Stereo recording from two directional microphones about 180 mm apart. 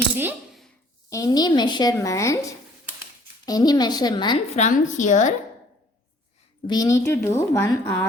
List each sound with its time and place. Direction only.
1.1 s a woman's voice: 20° left (ahead or behind)
4.5 s a woman's voice: 40° left (ahead or behind)
6.7 s a woman's voice: 20° left (ahead or behind)